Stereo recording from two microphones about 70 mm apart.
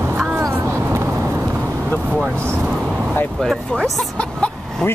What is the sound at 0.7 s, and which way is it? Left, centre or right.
Vehicle, right.